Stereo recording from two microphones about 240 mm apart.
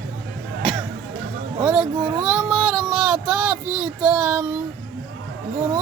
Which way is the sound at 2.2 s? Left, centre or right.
Centre.